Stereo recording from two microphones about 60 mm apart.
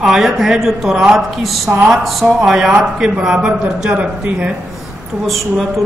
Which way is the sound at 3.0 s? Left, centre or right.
Centre.